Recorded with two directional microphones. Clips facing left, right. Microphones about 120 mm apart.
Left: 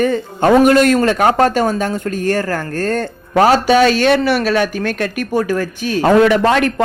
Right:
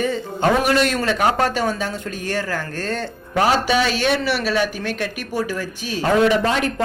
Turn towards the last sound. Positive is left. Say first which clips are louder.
# left 6 dB
turn(degrees=65)  # may be behind; listen again after turning